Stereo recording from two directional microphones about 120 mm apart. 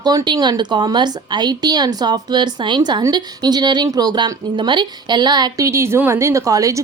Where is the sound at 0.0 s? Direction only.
35° right (ahead or behind).